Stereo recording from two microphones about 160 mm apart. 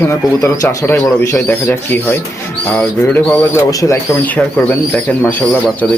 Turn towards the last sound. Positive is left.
turn(degrees=10)  # may be behind; listen again after turning